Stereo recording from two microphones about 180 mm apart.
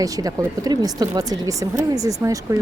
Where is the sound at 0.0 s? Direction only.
20° right (ahead or behind).